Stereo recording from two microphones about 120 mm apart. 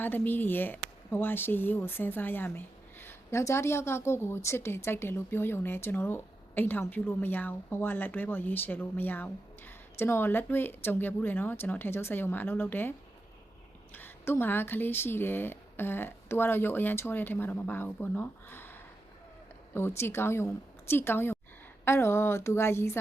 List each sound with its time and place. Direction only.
0.0 s speech: 15° left (ahead or behind)
13.9 s a woman's voice: 20° left (ahead or behind)